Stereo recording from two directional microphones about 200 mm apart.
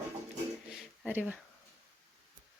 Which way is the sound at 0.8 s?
10° right (ahead or behind).